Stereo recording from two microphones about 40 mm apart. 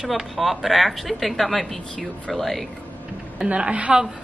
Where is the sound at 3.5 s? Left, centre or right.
Right.